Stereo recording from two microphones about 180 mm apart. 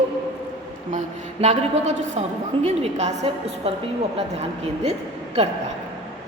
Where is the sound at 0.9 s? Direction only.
40° right (ahead or behind).